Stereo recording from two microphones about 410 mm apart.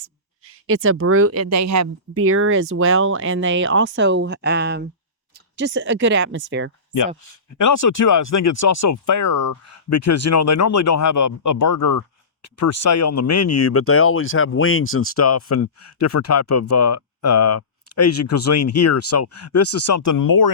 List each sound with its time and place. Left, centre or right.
0.7 s speech: right
7.6 s speech: left